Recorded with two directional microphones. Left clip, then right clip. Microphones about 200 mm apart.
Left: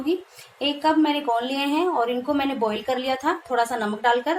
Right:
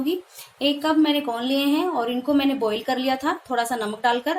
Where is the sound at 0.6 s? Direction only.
35° right (ahead or behind).